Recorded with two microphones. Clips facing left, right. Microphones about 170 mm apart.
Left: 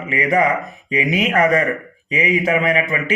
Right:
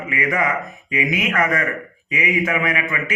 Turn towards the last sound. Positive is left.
turn(degrees=30)  # may be behind; listen again after turning